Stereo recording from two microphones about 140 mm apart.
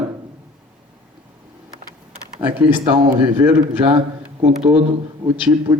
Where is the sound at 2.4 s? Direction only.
10° right (ahead or behind).